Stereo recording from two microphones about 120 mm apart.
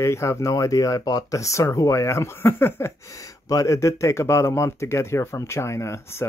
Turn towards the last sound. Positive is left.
turn(degrees=20)  # may be behind; listen again after turning